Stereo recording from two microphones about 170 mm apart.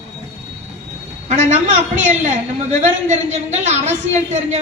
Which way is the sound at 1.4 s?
45° right (ahead or behind).